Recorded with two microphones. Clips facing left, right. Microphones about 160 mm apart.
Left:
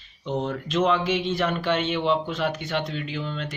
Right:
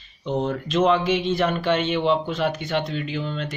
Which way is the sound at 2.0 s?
35° right (ahead or behind).